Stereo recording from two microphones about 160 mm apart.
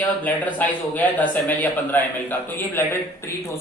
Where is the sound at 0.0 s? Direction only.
10° left (ahead or behind).